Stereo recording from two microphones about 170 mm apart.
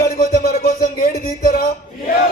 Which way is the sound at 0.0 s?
65° left (ahead or behind).